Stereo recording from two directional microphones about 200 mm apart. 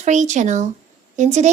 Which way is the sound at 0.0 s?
35° right (ahead or behind).